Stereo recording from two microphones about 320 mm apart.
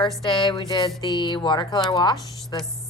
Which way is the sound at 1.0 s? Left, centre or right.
Centre.